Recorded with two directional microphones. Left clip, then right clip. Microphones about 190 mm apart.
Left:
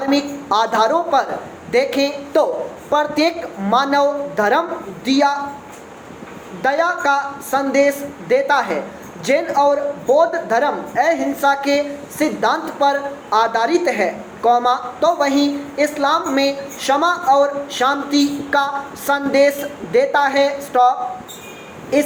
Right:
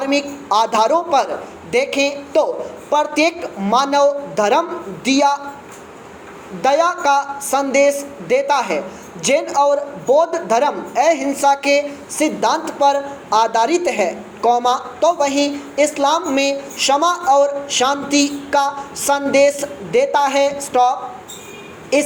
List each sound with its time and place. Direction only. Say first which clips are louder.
0.1 s a woman's voice: even; 25° right (ahead or behind)
6.6 s speech: right 2 dB; 25° right (ahead or behind)
21.9 s speech: right 1 dB; 25° right (ahead or behind)